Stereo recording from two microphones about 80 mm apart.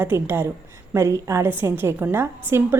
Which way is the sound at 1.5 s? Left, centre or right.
Right.